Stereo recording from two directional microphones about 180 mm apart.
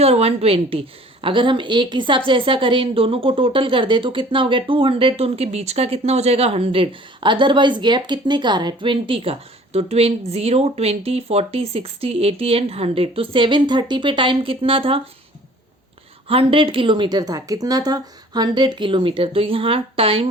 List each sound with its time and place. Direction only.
0.0 s a woman's voice: 35° right (ahead or behind)
16.3 s a woman's voice: 30° right (ahead or behind)